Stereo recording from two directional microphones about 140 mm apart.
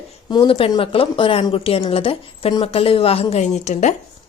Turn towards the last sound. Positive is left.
turn(degrees=55)  # may be behind; listen again after turning